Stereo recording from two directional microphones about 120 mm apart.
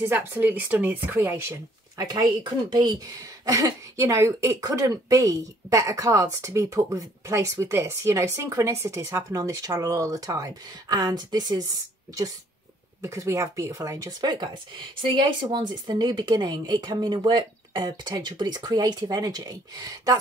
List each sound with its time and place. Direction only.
0.0 s a woman's voice: 15° right (ahead or behind)